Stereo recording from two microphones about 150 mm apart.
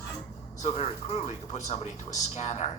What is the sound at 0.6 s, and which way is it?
Speech, 45° left (ahead or behind).